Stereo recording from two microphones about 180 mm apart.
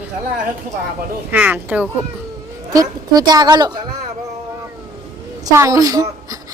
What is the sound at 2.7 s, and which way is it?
A woman's voice, 20° right (ahead or behind).